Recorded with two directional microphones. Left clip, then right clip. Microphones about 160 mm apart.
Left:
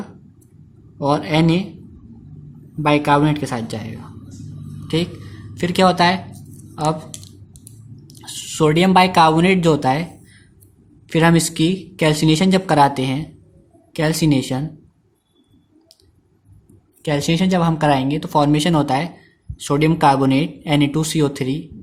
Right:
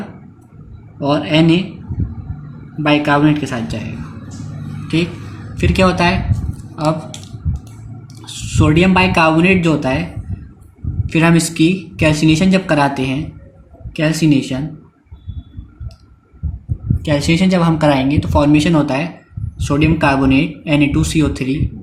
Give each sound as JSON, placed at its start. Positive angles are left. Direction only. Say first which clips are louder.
{"t": 0.9, "sound": "speech", "louder": "right 3 dB", "side_deg": 70}
{"t": 3.0, "sound": "speech", "louder": "right 3 dB", "side_deg": 65}
{"t": 5.5, "sound": "speech", "louder": "right 1 dB", "side_deg": 50}
{"t": 8.2, "sound": "speech", "louder": "even", "side_deg": 55}
{"t": 17.0, "sound": "speech", "louder": "right 4 dB", "side_deg": 45}